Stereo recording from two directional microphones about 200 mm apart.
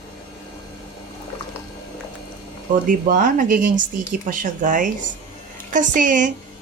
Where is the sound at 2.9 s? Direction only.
40° right (ahead or behind).